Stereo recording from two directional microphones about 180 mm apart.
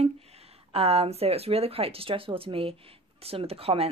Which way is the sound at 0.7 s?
35° right (ahead or behind).